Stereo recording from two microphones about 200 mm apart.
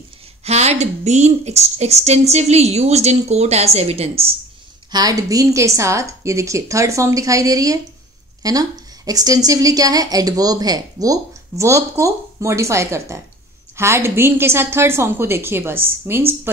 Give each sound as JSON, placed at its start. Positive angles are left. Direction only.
{"t": 0.4, "sound": "a woman's voice", "side_deg": -35}
{"t": 4.9, "sound": "a woman's voice", "side_deg": -20}